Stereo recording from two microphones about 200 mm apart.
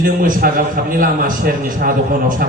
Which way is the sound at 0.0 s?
45° right (ahead or behind).